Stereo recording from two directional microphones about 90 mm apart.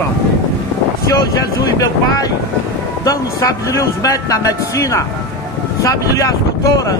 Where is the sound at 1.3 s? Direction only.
40° left (ahead or behind).